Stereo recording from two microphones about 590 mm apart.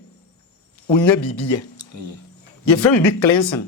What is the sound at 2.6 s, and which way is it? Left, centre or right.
Speech, left.